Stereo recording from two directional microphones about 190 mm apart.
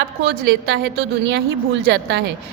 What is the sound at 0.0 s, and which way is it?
A woman's voice, 65° right (ahead or behind).